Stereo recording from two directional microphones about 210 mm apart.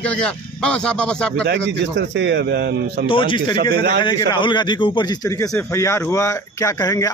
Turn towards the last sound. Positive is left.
turn(degrees=15)  # may be behind; listen again after turning